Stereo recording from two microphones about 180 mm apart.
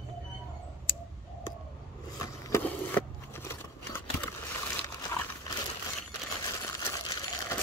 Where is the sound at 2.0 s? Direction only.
20° left (ahead or behind).